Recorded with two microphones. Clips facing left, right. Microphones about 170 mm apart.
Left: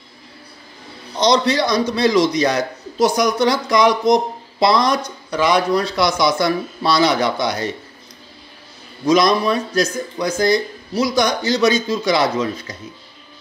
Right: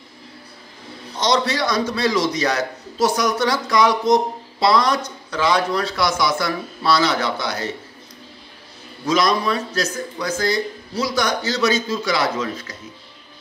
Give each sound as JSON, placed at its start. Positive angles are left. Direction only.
{"t": 1.2, "sound": "a man's voice", "side_deg": 15}
{"t": 9.0, "sound": "a man's voice", "side_deg": 20}